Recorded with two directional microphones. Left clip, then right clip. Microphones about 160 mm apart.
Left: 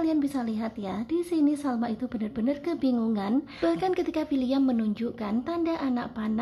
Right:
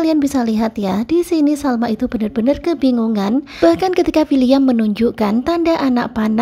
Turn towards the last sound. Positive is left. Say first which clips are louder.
# right 13 dB
turn(degrees=-45)  # may be behind; listen again after turning